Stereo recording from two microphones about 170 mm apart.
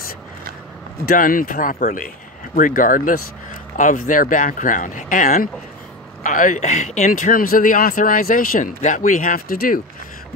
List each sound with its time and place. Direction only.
1.0 s speech: 55° left (ahead or behind)